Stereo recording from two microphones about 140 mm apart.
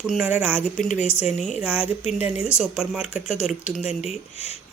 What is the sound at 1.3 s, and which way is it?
Speech, centre (ahead or behind).